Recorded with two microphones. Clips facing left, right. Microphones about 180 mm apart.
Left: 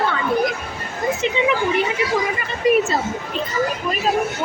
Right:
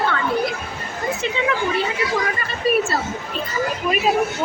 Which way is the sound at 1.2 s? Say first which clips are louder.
Left 2 dB; 20° left (ahead or behind).